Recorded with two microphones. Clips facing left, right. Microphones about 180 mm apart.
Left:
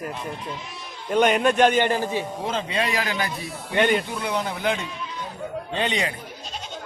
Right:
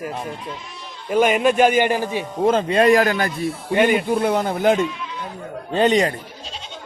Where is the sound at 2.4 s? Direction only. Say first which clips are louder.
Right 15 dB; 50° right (ahead or behind).